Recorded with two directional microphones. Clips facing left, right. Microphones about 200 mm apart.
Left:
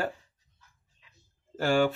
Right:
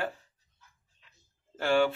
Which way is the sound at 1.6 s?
40° left (ahead or behind).